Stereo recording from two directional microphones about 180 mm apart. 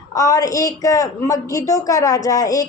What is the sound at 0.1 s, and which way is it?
A woman's voice, 20° left (ahead or behind).